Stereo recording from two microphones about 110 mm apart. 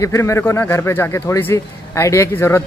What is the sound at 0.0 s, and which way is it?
A man's voice, 25° left (ahead or behind).